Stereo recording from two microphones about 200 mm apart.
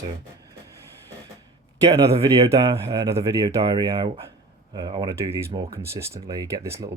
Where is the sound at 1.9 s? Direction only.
20° right (ahead or behind).